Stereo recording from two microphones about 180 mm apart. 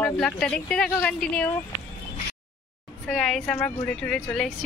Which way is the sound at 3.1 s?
Centre (ahead or behind).